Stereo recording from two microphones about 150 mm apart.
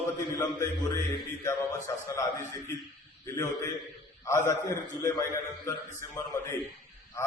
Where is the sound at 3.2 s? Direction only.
20° left (ahead or behind).